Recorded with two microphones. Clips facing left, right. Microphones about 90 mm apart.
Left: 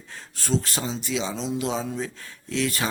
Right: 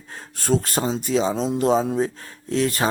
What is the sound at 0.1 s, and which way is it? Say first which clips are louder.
A man's voice: right 5 dB; 45° right (ahead or behind).